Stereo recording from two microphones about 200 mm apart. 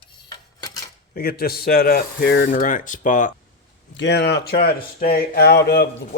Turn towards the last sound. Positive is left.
turn(degrees=55)  # may be behind; listen again after turning